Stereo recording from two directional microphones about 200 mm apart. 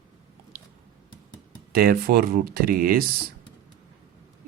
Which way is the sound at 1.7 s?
50° right (ahead or behind).